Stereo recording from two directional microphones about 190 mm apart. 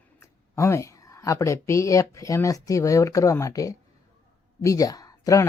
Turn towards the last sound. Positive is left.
turn(degrees=20)  # may be behind; listen again after turning